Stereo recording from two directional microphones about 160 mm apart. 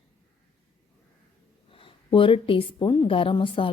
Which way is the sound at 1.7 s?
35° left (ahead or behind).